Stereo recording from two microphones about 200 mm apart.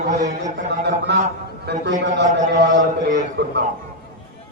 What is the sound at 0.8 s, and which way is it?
A man's voice, 55° right (ahead or behind).